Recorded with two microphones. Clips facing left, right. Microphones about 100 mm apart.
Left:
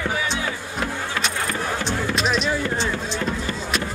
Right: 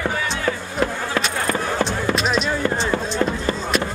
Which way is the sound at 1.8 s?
Centre (ahead or behind).